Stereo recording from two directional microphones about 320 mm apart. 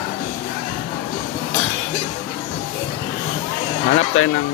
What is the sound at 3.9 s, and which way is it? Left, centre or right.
Speech, left.